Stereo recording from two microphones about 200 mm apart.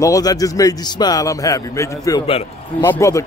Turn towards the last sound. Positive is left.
turn(degrees=15)  # may be behind; listen again after turning